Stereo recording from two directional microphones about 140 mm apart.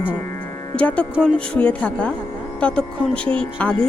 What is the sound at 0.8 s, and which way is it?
Speech, 10° left (ahead or behind).